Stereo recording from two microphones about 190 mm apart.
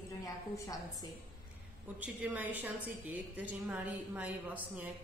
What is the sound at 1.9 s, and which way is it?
A woman's voice, 10° right (ahead or behind).